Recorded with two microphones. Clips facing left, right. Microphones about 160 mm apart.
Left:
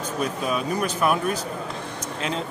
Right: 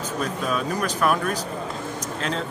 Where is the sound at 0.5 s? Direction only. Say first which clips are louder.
Right 1 dB; 10° left (ahead or behind).